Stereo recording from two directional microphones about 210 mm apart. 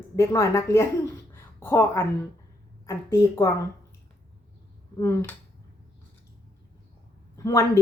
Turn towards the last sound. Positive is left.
turn(degrees=15)  # may be behind; listen again after turning